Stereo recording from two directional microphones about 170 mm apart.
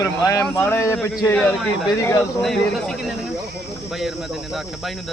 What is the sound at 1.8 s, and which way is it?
Speech, 20° left (ahead or behind).